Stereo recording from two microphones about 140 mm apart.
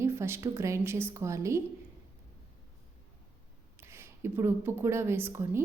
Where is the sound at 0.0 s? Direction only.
20° right (ahead or behind).